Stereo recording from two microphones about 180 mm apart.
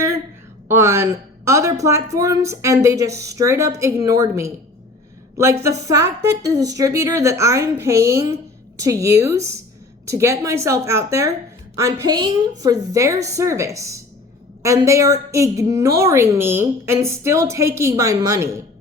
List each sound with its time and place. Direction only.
0.7 s a woman's voice: 15° right (ahead or behind)
5.6 s a woman's voice: 15° right (ahead or behind)